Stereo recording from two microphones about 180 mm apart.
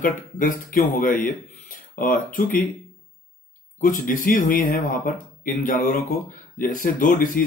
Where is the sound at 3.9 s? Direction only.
50° left (ahead or behind).